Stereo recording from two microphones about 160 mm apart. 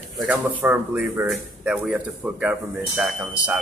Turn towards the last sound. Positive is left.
turn(degrees=-10)  # may be behind; listen again after turning